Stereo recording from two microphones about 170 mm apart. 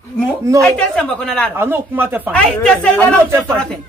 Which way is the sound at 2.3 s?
5° left (ahead or behind).